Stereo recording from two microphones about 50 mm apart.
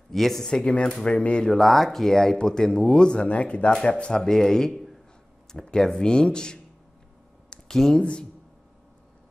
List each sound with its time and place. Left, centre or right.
0.1 s speech: centre
0.5 s speech: centre
1.4 s speech: centre
7.4 s a sound: centre
7.7 s speech: centre